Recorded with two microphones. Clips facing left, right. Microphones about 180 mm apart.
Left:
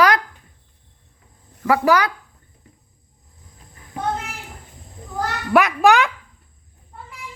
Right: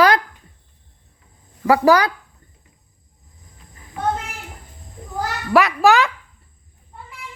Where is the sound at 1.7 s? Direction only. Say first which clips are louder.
Right 3 dB; 35° right (ahead or behind).